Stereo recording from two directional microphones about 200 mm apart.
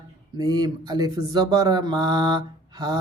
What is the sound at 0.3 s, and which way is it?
Speech, 20° right (ahead or behind).